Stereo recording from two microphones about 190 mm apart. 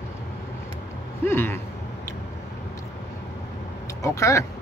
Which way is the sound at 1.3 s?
10° left (ahead or behind).